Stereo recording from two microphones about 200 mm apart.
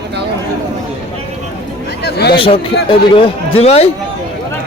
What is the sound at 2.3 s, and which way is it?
A man's voice, 25° left (ahead or behind).